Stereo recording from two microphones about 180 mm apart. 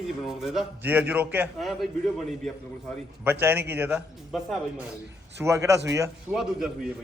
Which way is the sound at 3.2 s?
10° right (ahead or behind).